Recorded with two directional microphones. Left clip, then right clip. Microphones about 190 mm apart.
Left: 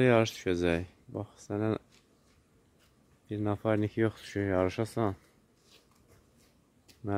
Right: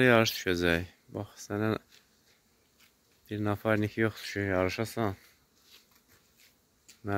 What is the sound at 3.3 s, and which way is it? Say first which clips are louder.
Speech: right 1 dB; 10° left (ahead or behind).